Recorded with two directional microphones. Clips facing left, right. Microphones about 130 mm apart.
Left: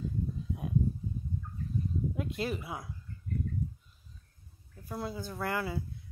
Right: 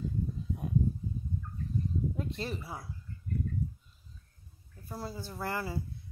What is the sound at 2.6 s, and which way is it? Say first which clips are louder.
Speech: left 2 dB; 20° left (ahead or behind).